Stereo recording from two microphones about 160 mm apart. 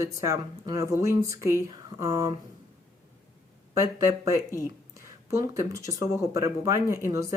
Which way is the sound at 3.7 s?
15° right (ahead or behind).